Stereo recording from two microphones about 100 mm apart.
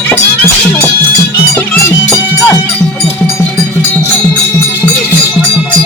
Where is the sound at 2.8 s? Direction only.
10° left (ahead or behind).